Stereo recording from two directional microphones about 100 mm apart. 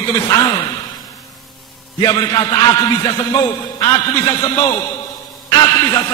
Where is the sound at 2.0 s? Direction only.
45° left (ahead or behind).